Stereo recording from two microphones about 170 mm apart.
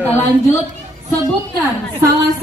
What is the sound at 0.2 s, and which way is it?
Speech, 15° left (ahead or behind).